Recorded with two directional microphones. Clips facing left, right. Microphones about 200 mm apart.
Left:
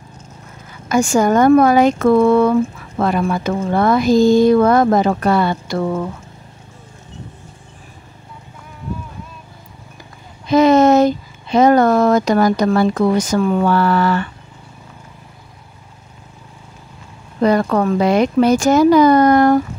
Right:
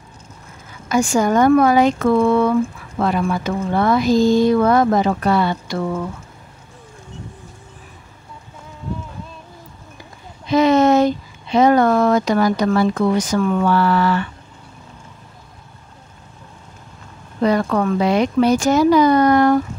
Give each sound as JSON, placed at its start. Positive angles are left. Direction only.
{"t": 0.8, "sound": "speech", "side_deg": 50}
{"t": 10.5, "sound": "speech", "side_deg": 45}
{"t": 13.4, "sound": "a sound", "side_deg": 35}
{"t": 13.7, "sound": "speech", "side_deg": 45}
{"t": 17.4, "sound": "speech", "side_deg": 45}